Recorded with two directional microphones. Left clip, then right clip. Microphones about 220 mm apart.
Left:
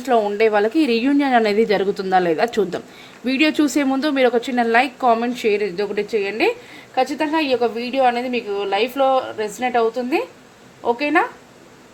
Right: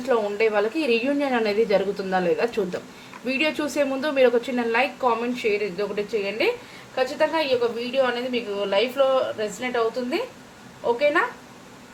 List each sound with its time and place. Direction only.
0.0 s a woman's voice: 45° left (ahead or behind)